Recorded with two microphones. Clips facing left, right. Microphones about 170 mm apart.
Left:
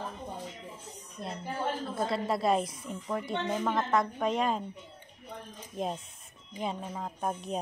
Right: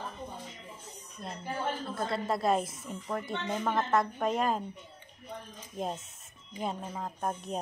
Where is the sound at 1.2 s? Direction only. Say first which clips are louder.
Left 3 dB; 30° left (ahead or behind).